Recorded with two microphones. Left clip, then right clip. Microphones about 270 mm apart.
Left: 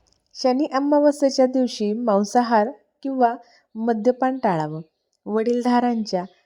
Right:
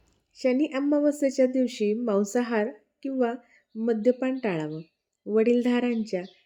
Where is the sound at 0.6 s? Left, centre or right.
Left.